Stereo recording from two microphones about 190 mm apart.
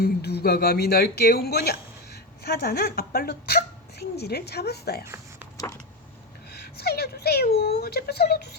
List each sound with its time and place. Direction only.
0.0 s speech: 60° left (ahead or behind)
5.0 s a sound: 15° right (ahead or behind)
6.5 s speech: 60° left (ahead or behind)